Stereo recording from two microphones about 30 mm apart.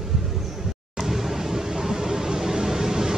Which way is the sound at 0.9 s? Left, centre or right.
Centre.